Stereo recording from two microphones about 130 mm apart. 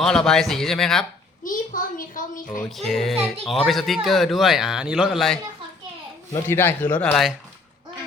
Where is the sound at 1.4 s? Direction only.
90° left.